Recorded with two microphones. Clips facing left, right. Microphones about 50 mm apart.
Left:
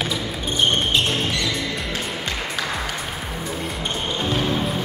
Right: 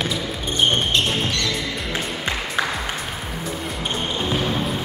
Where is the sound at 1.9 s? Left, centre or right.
Right.